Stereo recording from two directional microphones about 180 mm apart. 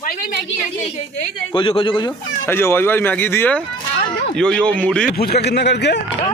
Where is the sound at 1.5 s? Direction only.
30° left (ahead or behind).